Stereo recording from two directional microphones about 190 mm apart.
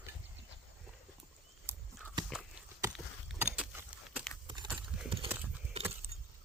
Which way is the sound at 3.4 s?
10° right (ahead or behind).